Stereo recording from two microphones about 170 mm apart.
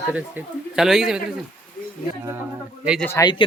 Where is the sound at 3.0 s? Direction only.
15° left (ahead or behind).